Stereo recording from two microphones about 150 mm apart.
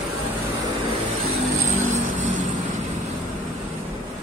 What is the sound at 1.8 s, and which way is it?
Vehicle, 55° right (ahead or behind).